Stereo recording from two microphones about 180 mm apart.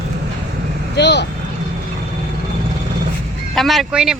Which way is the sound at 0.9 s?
70° left (ahead or behind).